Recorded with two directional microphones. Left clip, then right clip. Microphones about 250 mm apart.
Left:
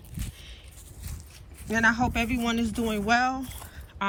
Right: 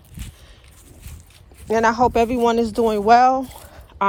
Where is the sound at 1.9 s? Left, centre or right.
Centre.